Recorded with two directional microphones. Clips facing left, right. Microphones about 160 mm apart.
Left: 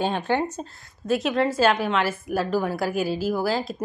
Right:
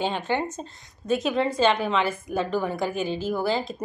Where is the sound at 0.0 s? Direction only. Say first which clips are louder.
Left 2 dB; 10° left (ahead or behind).